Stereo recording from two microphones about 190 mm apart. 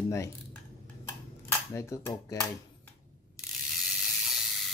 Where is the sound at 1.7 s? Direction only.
15° left (ahead or behind).